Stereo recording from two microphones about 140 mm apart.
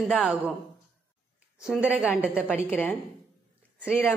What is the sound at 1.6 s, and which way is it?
Speech, 5° right (ahead or behind).